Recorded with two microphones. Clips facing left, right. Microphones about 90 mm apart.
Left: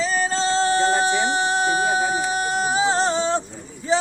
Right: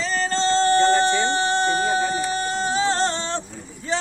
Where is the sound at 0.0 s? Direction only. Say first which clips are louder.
Left 1 dB; 10° left (ahead or behind).